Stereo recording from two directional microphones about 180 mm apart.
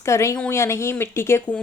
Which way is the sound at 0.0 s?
15° left (ahead or behind).